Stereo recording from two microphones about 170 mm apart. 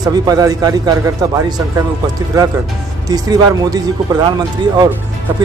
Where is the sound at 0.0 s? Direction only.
25° right (ahead or behind).